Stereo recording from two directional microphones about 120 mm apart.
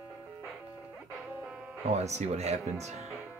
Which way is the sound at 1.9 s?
65° right (ahead or behind).